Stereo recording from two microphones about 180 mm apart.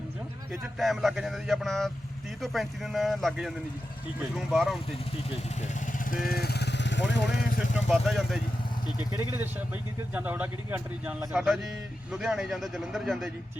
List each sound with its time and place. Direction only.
0.8 s a man's voice: centre (ahead or behind)
5.6 s speech: 50° left (ahead or behind); by 7.3 s 80° left
7.9 s a man's voice: centre (ahead or behind)
9.0 s a man's voice: 15° right (ahead or behind)